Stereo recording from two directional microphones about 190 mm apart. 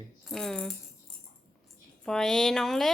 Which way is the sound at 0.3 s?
5° left (ahead or behind).